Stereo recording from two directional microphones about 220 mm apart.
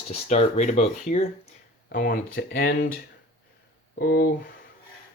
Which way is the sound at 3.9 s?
45° left (ahead or behind).